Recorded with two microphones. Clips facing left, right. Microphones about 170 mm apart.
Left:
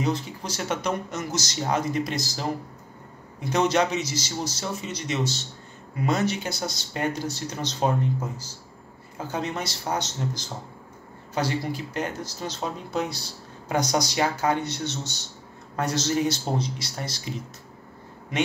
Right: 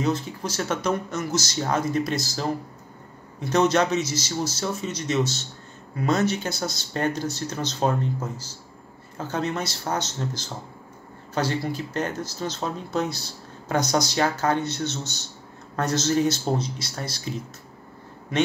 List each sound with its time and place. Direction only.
0.0 s speech: 15° left (ahead or behind)